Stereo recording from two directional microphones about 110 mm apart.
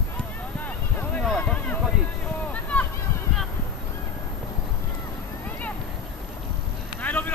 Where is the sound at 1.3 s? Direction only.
10° left (ahead or behind).